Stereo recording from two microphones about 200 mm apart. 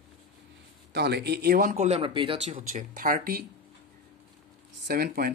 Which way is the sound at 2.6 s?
40° right (ahead or behind).